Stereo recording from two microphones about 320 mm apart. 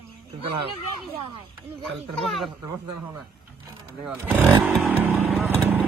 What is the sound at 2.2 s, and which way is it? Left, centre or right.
Speech, centre.